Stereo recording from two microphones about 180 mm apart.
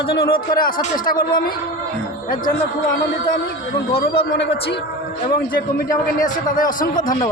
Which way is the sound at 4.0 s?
70° left (ahead or behind).